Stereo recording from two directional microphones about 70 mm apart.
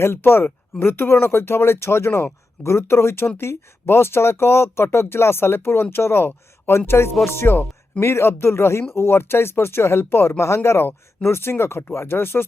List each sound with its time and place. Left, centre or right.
0.0 s speech: left
8.0 s speech: left